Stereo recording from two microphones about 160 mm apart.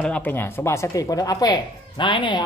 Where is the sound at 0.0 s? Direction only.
10° left (ahead or behind).